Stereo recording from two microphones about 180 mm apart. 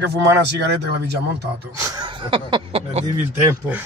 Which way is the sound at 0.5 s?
70° right (ahead or behind).